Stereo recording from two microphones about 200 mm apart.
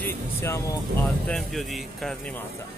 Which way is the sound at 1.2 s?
Centre (ahead or behind).